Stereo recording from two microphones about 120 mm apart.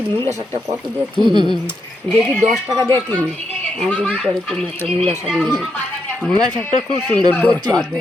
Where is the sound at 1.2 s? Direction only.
40° right (ahead or behind).